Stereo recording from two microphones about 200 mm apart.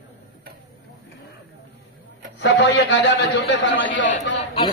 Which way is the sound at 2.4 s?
60° left (ahead or behind).